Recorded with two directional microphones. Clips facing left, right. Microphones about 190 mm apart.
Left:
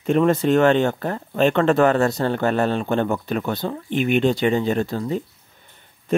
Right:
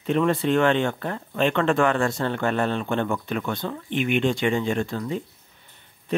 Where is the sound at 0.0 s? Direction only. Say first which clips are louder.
Left 4 dB; 45° left (ahead or behind).